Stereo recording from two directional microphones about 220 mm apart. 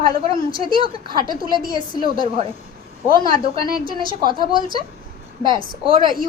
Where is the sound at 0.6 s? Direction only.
25° right (ahead or behind).